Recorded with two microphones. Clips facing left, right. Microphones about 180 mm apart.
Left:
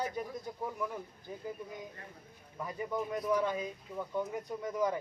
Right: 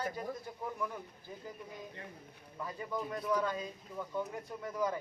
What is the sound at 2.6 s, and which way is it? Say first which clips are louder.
Speech: left 3 dB; 15° left (ahead or behind).